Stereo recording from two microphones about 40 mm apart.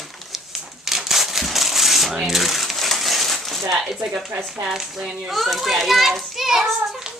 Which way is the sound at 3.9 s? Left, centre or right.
Centre.